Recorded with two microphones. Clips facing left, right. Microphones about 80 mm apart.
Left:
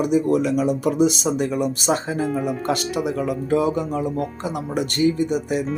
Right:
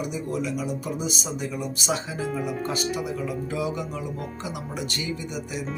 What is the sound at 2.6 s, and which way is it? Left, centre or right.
Speech, left.